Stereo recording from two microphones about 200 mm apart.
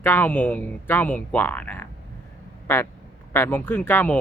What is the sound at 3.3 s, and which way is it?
Speech, 10° left (ahead or behind).